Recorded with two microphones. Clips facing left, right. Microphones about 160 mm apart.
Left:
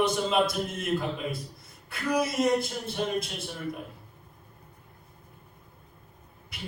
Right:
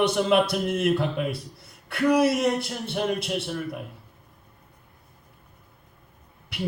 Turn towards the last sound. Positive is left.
turn(degrees=-70)  # may be behind; listen again after turning